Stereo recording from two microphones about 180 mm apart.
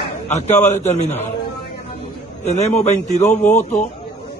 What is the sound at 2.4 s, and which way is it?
Speech, 40° left (ahead or behind).